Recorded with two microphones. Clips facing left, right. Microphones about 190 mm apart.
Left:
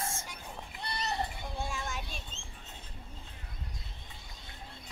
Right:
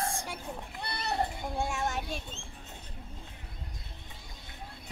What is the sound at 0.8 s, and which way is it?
Children playing, 60° right (ahead or behind).